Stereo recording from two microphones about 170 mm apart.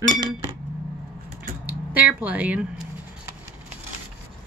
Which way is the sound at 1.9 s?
10° right (ahead or behind).